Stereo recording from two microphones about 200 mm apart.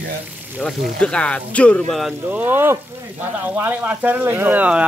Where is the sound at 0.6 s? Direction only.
5° left (ahead or behind).